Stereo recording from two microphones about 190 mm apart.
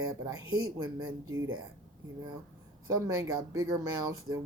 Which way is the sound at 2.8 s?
15° right (ahead or behind).